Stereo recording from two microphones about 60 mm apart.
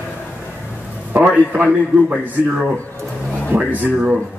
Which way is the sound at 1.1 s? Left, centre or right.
Right.